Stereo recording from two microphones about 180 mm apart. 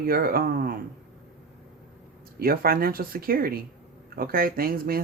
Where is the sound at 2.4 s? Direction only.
55° right (ahead or behind).